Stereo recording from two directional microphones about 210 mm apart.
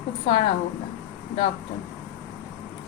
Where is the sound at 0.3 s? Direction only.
25° left (ahead or behind).